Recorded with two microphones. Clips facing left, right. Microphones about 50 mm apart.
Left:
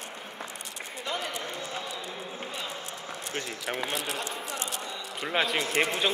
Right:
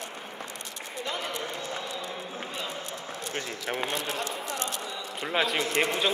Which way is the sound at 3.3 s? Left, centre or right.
Centre.